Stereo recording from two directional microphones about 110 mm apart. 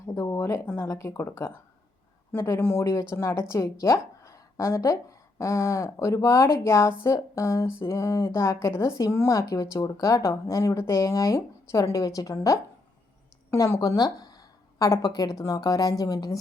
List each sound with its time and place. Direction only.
0.0 s speech: 30° left (ahead or behind)
13.7 s a woman's voice: 35° left (ahead or behind)